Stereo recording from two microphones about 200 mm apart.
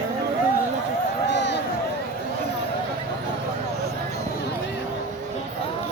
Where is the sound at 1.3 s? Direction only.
60° left (ahead or behind).